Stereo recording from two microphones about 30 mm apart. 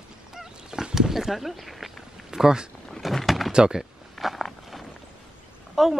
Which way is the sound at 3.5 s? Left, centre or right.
Right.